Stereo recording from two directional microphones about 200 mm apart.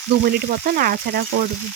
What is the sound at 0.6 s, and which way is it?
Speech, 50° right (ahead or behind).